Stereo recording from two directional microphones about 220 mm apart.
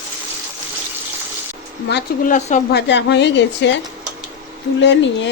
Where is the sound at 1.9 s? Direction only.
50° left (ahead or behind).